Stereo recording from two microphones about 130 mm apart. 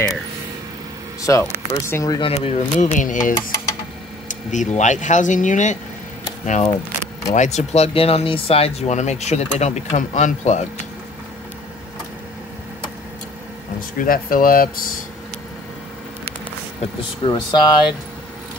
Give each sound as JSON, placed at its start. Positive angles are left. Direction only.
{"t": 1.3, "sound": "speech", "side_deg": 20}
{"t": 2.3, "sound": "speech", "side_deg": 55}
{"t": 3.0, "sound": "speech", "side_deg": 85}
{"t": 4.3, "sound": "speech", "side_deg": 70}
{"t": 13.7, "sound": "speech", "side_deg": 90}
{"t": 17.2, "sound": "speech", "side_deg": 35}